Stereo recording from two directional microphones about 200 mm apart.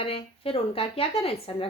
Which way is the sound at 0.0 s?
30° left (ahead or behind).